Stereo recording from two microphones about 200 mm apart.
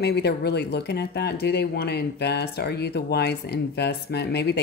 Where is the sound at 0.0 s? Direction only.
55° left (ahead or behind).